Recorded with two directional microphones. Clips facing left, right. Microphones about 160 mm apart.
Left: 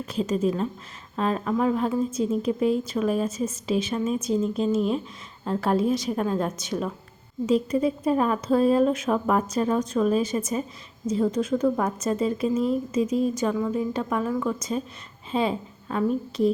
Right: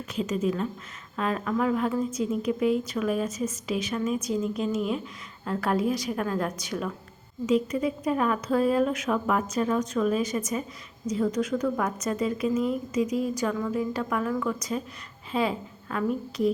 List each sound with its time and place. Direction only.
0.1 s a woman's voice: 35° left (ahead or behind)